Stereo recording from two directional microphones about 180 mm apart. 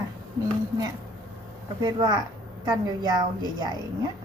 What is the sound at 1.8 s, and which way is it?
A woman's voice, 25° right (ahead or behind).